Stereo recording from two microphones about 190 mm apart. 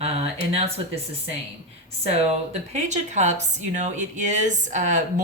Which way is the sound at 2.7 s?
35° right (ahead or behind).